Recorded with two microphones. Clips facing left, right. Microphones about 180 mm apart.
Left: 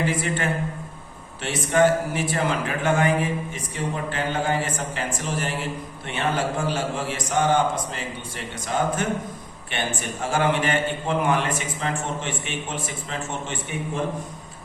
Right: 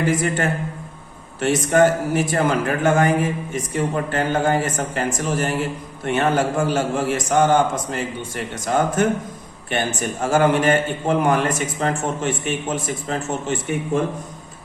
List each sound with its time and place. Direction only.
0.1 s a man's voice: 45° right (ahead or behind)